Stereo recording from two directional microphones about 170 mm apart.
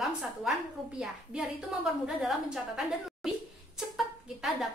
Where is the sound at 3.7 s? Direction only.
Centre (ahead or behind).